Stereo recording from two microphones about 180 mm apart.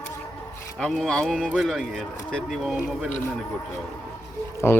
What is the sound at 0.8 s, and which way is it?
Speech, centre (ahead or behind).